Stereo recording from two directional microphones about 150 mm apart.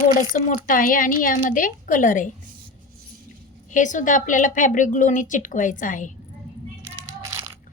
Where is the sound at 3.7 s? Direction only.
55° left (ahead or behind).